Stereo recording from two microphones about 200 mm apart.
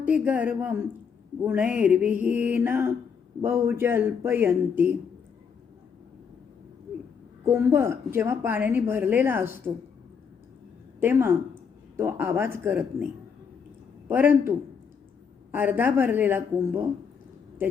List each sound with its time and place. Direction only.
0.0 s a woman's voice: 10° right (ahead or behind)
7.4 s a woman's voice: 10° right (ahead or behind)
11.0 s a woman's voice: 10° right (ahead or behind)
14.1 s a woman's voice: 10° right (ahead or behind)
15.5 s a woman's voice: 10° right (ahead or behind)